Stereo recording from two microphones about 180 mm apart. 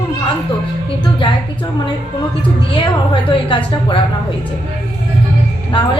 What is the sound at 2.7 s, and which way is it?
A woman's voice, 25° left (ahead or behind).